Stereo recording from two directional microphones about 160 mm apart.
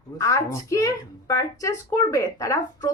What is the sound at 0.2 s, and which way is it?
Speech, 20° left (ahead or behind).